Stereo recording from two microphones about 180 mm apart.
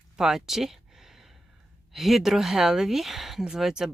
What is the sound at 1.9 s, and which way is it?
Speech, centre (ahead or behind).